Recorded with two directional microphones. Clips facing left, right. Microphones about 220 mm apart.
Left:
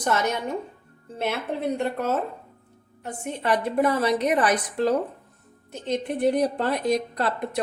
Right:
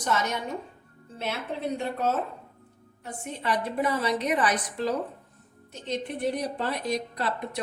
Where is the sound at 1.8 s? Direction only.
55° left (ahead or behind).